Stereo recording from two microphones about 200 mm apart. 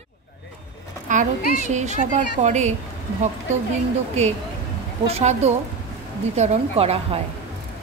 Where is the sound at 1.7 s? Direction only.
35° right (ahead or behind).